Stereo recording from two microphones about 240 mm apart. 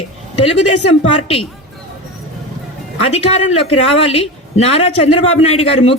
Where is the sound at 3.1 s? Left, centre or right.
Left.